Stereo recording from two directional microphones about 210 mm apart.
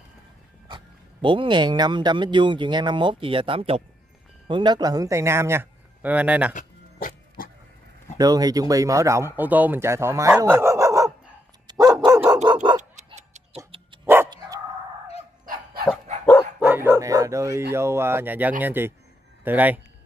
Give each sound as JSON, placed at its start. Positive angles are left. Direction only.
{"t": 0.7, "sound": "a man's voice", "side_deg": -25}
{"t": 6.5, "sound": "music", "side_deg": 40}
{"t": 8.2, "sound": "speech", "side_deg": -20}
{"t": 11.6, "sound": "dog", "side_deg": -15}
{"t": 12.4, "sound": "dog", "side_deg": -25}
{"t": 14.0, "sound": "dog", "side_deg": -10}
{"t": 15.4, "sound": "dog", "side_deg": -40}
{"t": 16.5, "sound": "dog", "side_deg": -10}
{"t": 17.7, "sound": "speech", "side_deg": -10}